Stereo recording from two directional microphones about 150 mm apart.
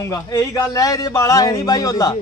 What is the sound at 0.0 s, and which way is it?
A man's voice, 20° left (ahead or behind).